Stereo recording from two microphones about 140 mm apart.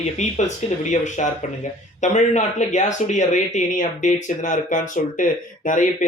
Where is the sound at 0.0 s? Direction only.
55° left (ahead or behind).